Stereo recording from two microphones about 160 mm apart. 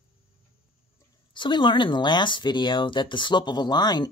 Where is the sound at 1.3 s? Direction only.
30° left (ahead or behind).